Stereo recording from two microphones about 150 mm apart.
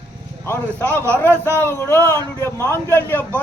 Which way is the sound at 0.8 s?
10° left (ahead or behind).